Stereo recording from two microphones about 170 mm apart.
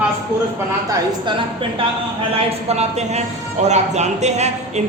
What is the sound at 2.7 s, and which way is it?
Speech, 40° right (ahead or behind).